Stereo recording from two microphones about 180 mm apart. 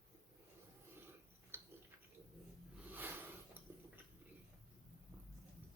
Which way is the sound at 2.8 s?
10° right (ahead or behind).